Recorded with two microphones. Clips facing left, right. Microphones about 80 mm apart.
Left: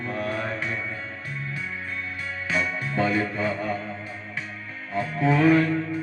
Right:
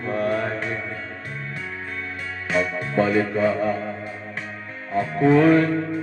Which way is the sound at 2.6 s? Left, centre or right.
Right.